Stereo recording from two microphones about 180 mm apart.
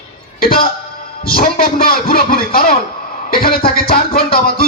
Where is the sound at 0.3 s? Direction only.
55° left (ahead or behind).